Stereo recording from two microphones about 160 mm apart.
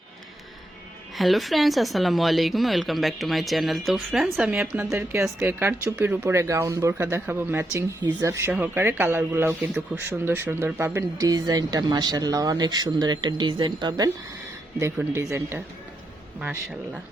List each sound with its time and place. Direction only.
1.1 s a woman's voice: centre (ahead or behind)
4.6 s speech: 15° right (ahead or behind)